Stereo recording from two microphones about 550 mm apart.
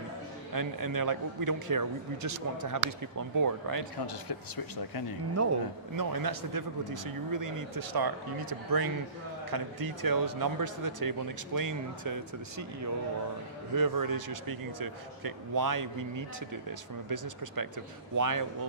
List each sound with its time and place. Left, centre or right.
0.5 s speech: right
4.0 s speech: left
6.0 s speech: right